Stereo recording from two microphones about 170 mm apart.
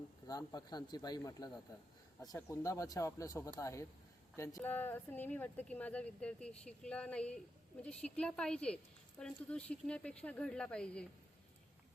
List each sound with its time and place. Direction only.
0.3 s speech: 20° left (ahead or behind); by 11.0 s 5° left (ahead or behind)